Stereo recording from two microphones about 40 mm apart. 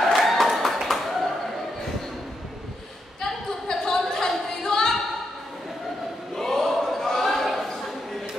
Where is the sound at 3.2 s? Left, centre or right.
Centre.